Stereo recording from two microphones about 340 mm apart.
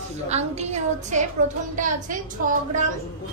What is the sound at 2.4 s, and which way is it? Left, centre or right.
Speech, right.